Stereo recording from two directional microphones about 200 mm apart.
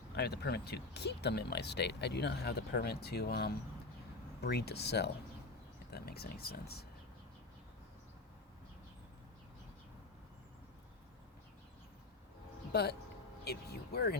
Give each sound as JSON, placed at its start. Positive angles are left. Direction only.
{"t": 0.1, "sound": "speech", "side_deg": 55}
{"t": 12.7, "sound": "speech", "side_deg": 50}